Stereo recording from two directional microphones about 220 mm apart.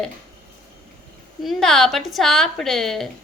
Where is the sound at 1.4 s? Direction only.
Centre (ahead or behind).